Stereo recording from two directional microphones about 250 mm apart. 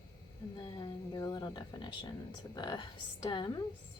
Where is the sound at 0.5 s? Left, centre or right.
Centre.